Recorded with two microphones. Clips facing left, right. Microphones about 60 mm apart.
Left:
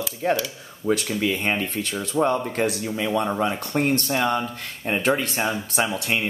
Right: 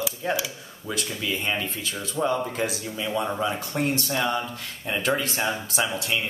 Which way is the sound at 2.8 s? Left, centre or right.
Left.